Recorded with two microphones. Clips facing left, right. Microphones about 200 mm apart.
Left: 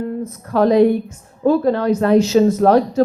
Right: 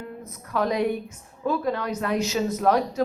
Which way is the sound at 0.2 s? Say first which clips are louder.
Left 9 dB; 30° left (ahead or behind).